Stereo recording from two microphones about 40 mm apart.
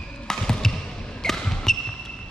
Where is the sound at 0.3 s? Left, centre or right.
Centre.